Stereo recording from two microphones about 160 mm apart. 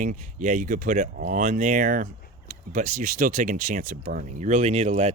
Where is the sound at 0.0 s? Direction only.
55° right (ahead or behind).